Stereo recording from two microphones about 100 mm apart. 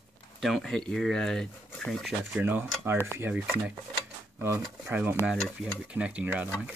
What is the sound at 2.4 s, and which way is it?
Speech, 20° right (ahead or behind).